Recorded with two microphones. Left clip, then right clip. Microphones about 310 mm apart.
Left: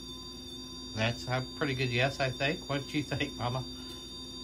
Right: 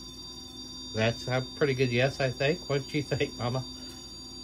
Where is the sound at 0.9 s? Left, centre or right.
Centre.